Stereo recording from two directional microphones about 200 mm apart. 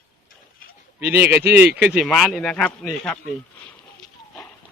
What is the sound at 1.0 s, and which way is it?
Speech, 10° right (ahead or behind).